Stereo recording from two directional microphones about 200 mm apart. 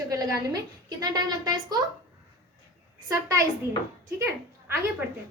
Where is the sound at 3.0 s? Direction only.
15° right (ahead or behind).